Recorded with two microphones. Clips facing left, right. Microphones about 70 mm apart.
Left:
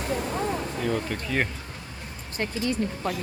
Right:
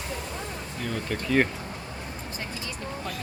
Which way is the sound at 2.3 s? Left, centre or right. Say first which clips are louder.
Left 12 dB; left.